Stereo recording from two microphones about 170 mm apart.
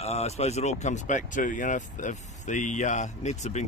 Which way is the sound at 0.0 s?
40° left (ahead or behind).